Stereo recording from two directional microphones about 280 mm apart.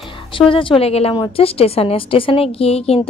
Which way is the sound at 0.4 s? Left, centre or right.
Centre.